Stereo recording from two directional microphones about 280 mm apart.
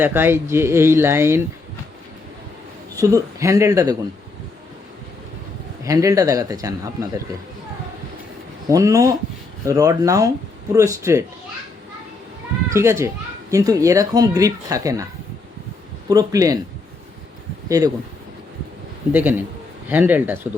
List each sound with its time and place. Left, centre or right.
0.0 s speech: centre
2.9 s speech: centre
5.8 s speech: centre
8.7 s speech: centre
12.7 s speech: centre
16.0 s speech: centre
17.7 s speech: centre
19.1 s speech: centre